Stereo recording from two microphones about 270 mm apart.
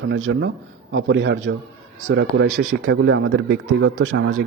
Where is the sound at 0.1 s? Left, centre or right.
Right.